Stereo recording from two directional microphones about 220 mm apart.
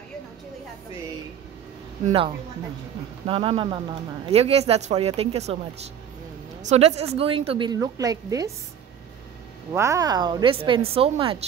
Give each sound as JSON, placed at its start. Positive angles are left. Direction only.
{"t": 2.0, "sound": "a woman's voice", "side_deg": -25}
{"t": 6.6, "sound": "a woman's voice", "side_deg": -30}
{"t": 9.7, "sound": "a woman's voice", "side_deg": -15}